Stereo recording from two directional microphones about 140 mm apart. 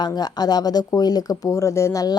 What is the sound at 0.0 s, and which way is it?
A woman's voice, 30° left (ahead or behind).